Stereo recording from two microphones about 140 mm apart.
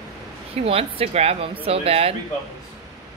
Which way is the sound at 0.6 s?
45° right (ahead or behind).